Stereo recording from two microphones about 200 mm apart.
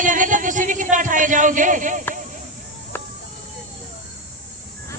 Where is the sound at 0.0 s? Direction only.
40° right (ahead or behind).